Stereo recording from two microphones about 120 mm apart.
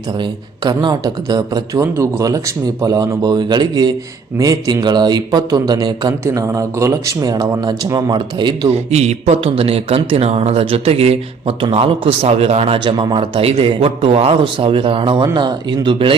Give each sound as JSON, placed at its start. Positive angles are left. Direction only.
{"t": 0.2, "sound": "speech", "side_deg": -40}
{"t": 8.7, "sound": "speech", "side_deg": -65}